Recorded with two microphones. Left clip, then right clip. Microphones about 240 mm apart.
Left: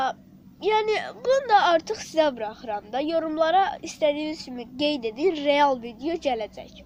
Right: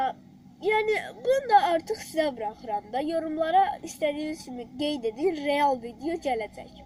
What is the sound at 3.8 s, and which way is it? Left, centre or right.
Speech, left.